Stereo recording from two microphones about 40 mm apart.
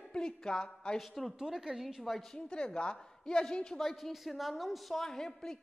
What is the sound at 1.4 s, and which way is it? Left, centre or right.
Speech, centre.